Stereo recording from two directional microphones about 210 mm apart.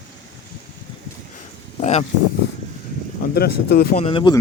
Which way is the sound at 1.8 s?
30° left (ahead or behind).